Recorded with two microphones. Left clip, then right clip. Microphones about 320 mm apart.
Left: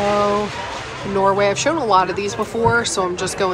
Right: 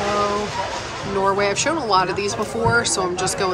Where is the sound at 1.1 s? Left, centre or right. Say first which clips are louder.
Left 3 dB; centre.